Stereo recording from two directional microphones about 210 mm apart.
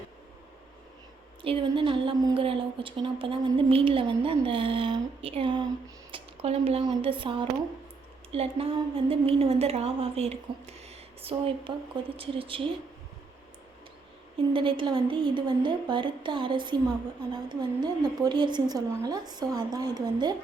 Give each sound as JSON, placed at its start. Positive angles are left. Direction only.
{"t": 1.4, "sound": "speech", "side_deg": -25}
{"t": 14.5, "sound": "speech", "side_deg": -25}